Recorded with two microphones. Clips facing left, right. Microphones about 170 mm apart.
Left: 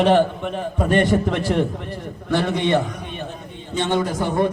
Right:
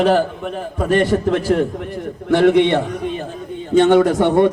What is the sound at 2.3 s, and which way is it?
Speech, 60° right (ahead or behind).